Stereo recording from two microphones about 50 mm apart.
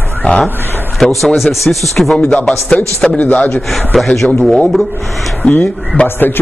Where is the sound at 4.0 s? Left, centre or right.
Centre.